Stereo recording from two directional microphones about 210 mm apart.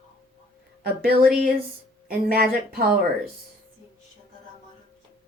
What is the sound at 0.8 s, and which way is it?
A woman's voice, 45° right (ahead or behind).